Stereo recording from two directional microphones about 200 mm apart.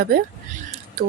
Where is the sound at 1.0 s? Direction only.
50° right (ahead or behind).